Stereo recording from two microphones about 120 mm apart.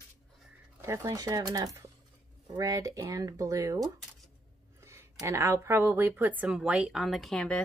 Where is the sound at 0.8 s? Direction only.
25° right (ahead or behind).